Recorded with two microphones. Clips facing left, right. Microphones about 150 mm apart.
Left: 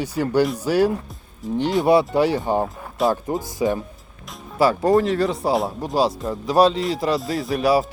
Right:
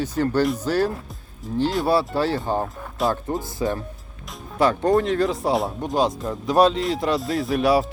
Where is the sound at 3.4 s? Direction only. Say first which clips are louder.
Left 3 dB; 15° left (ahead or behind).